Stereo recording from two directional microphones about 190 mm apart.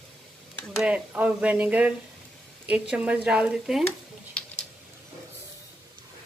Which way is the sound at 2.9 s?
5° right (ahead or behind).